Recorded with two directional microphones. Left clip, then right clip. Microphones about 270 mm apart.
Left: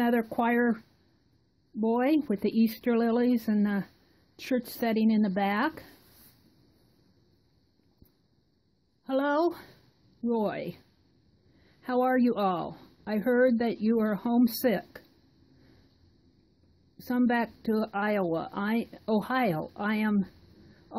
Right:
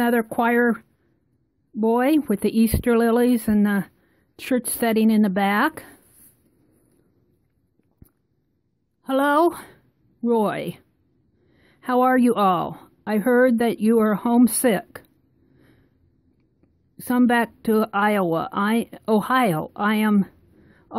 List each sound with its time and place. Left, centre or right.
0.0 s a woman's voice: right
9.0 s a woman's voice: right
17.0 s a woman's voice: right